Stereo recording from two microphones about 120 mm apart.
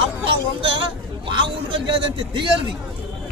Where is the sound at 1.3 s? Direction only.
45° right (ahead or behind).